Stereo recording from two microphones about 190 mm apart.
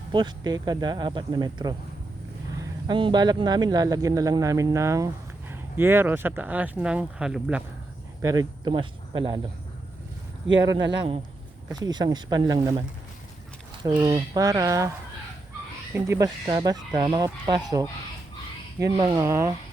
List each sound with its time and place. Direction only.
0.1 s speech: 25° right (ahead or behind); by 7.6 s 5° right (ahead or behind)
8.2 s speech: 20° right (ahead or behind)
11.7 s speech: 20° right (ahead or behind)
14.0 s speech: 20° right (ahead or behind)
15.9 s speech: 15° right (ahead or behind)